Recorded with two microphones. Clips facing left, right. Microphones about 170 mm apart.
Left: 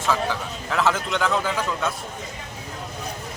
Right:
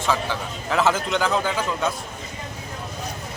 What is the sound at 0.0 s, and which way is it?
A man's voice, centre (ahead or behind).